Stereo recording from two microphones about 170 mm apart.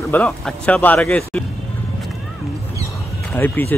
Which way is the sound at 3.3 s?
10° left (ahead or behind).